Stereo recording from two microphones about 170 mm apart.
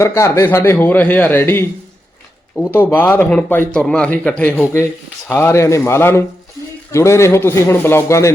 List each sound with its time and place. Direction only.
0.0 s a man's voice: 15° left (ahead or behind)